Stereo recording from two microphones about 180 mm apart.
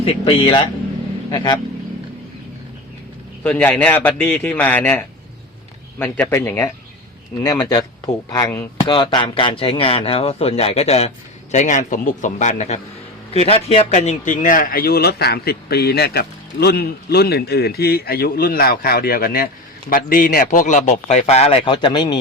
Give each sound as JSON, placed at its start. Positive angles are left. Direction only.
{"t": 0.0, "sound": "speech", "side_deg": 35}
{"t": 3.4, "sound": "a man's voice", "side_deg": 10}